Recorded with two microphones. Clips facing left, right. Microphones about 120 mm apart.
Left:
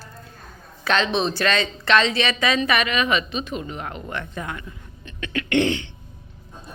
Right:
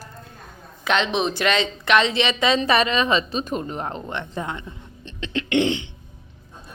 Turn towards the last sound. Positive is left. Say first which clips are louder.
# even
turn(degrees=-20)  # may be behind; listen again after turning